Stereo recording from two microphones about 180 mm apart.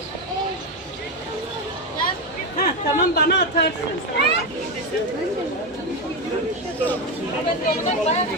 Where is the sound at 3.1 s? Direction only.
60° left (ahead or behind).